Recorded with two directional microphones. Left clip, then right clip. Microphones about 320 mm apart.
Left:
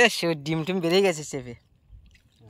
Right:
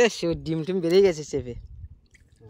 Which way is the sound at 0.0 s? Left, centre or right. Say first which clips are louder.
Left 1 dB; centre.